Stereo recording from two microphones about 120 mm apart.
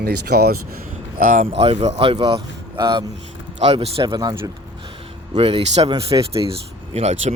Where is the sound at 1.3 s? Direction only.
90° right.